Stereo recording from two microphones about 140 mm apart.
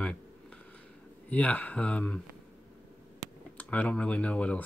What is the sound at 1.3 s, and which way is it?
Speech, 10° left (ahead or behind).